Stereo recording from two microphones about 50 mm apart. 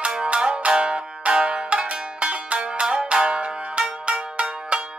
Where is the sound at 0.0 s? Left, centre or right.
Right.